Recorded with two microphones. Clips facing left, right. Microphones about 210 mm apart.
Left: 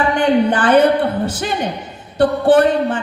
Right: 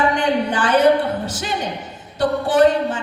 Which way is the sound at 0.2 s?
55° left (ahead or behind).